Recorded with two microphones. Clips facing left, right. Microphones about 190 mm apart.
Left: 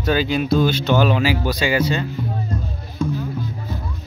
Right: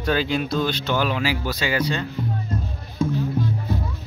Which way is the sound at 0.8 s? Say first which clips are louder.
Left 5 dB; 25° left (ahead or behind).